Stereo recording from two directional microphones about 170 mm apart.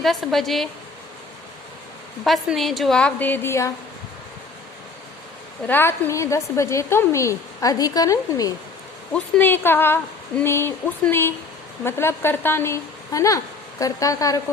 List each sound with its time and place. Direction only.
0.0 s a woman's voice: centre (ahead or behind)
2.2 s a woman's voice: centre (ahead or behind)
5.6 s a woman's voice: 10° left (ahead or behind)